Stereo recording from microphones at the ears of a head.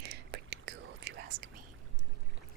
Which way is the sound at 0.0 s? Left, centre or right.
Right.